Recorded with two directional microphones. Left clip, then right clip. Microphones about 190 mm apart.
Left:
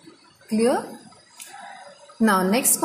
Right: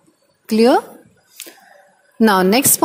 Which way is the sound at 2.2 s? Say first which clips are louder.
Right 7 dB; 50° right (ahead or behind).